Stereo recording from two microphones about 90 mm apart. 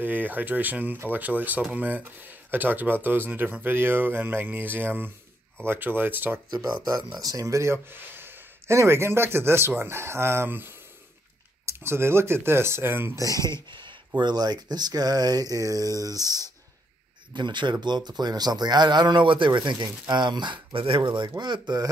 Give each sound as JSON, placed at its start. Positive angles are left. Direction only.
{"t": 0.0, "sound": "speech", "side_deg": -20}
{"t": 6.5, "sound": "speech", "side_deg": -50}
{"t": 13.7, "sound": "speech", "side_deg": -60}
{"t": 17.3, "sound": "speech", "side_deg": -55}